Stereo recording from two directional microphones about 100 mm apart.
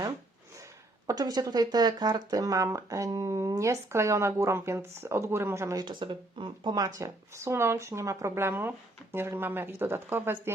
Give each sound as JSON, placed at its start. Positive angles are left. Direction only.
{"t": 1.0, "sound": "speech", "side_deg": -40}
{"t": 5.8, "sound": "speech", "side_deg": -50}
{"t": 6.7, "sound": "speech", "side_deg": -35}